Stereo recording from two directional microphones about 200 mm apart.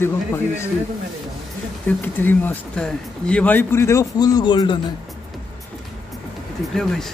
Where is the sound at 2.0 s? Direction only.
10° left (ahead or behind).